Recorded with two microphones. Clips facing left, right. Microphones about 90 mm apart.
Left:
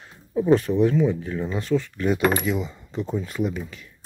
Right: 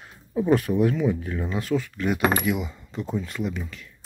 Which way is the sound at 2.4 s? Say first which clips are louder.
Even; 5° right (ahead or behind).